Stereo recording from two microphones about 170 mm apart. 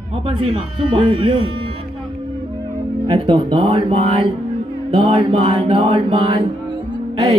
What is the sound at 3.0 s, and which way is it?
Mantra, 35° right (ahead or behind).